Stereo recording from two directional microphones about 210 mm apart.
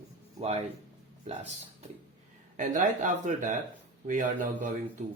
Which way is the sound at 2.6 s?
35° right (ahead or behind).